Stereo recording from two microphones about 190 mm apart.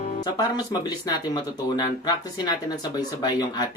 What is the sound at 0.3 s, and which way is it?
Speech, 20° left (ahead or behind).